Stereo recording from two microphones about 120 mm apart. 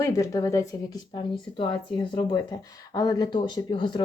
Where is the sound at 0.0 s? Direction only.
30° left (ahead or behind).